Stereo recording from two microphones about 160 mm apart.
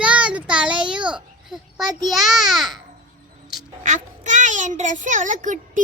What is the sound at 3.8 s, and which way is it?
A child's voice, 50° right (ahead or behind).